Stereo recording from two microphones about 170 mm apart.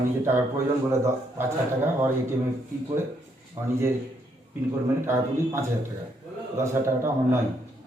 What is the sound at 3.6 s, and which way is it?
Speech, 20° right (ahead or behind).